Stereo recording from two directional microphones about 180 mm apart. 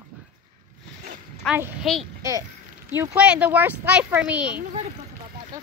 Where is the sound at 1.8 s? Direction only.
Centre (ahead or behind).